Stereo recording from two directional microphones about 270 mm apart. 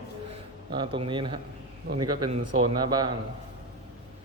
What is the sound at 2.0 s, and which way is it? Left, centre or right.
Speech, right.